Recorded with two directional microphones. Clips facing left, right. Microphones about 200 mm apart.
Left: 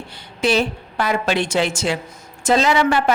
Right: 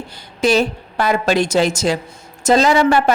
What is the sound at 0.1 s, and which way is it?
A woman's voice, 40° right (ahead or behind).